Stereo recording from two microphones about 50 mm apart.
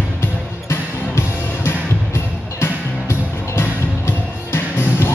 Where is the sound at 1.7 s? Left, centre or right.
Left.